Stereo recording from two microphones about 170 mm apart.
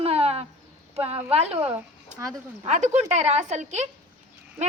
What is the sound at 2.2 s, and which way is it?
Speech, 20° right (ahead or behind).